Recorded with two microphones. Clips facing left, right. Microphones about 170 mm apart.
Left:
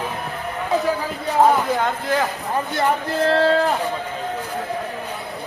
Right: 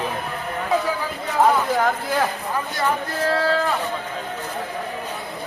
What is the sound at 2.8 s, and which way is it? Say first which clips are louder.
Speech: left 4 dB; 25° left (ahead or behind).